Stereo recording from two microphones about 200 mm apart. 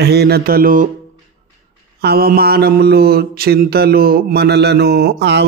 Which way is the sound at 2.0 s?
50° right (ahead or behind).